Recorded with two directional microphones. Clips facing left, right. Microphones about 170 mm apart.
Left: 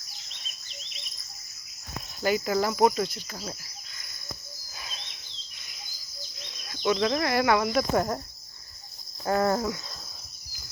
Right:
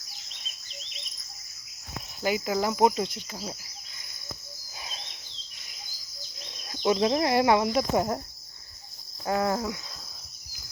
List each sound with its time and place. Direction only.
2.2 s cricket: 15° right (ahead or behind)
4.8 s bird: 30° right (ahead or behind)
6.6 s cricket: 30° right (ahead or behind)
9.2 s cricket: 15° right (ahead or behind)